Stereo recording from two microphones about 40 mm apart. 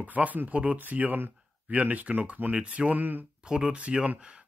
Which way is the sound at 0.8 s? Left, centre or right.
Right.